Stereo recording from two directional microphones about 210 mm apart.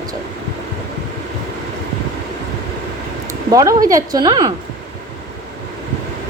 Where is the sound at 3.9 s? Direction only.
15° right (ahead or behind).